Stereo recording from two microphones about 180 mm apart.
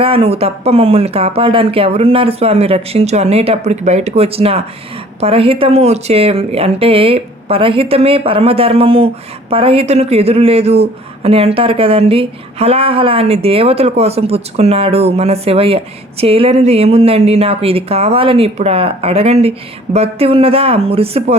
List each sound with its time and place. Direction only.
0.0 s speech: 30° right (ahead or behind)